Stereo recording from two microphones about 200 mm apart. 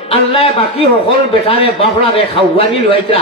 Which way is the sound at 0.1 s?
30° left (ahead or behind).